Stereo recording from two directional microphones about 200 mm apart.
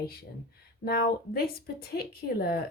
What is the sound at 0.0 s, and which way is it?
Speech, 50° left (ahead or behind).